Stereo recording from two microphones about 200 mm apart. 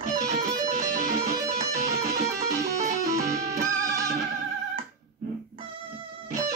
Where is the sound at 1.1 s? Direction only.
15° right (ahead or behind).